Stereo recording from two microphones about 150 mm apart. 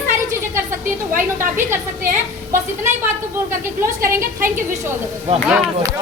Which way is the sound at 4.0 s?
20° right (ahead or behind).